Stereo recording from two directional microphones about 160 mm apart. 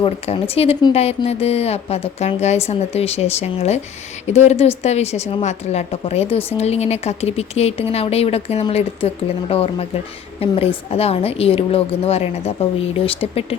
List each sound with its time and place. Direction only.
0.0 s a woman's voice: 40° left (ahead or behind)